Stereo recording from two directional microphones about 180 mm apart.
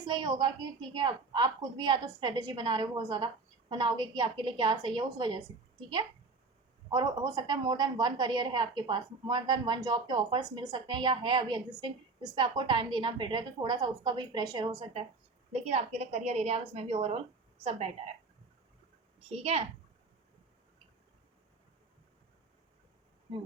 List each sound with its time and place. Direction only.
0.0 s a woman's voice: 25° right (ahead or behind)
6.9 s a woman's voice: 20° right (ahead or behind)
15.5 s a woman's voice: 35° right (ahead or behind)
19.3 s a woman's voice: 35° right (ahead or behind)